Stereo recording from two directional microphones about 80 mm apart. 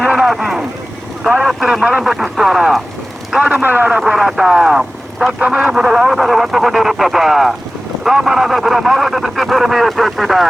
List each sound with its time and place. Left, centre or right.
0.1 s a sound: centre
1.4 s speech: centre
1.8 s speech: centre
2.0 s speech: centre
3.5 s speech: right
3.9 s speech: centre
5.4 s speech: centre